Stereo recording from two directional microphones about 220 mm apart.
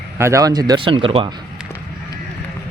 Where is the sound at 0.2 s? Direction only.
15° right (ahead or behind).